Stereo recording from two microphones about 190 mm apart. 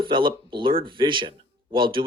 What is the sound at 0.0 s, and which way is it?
Speech, 25° right (ahead or behind).